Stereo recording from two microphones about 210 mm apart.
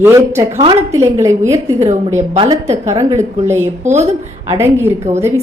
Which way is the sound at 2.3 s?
30° right (ahead or behind).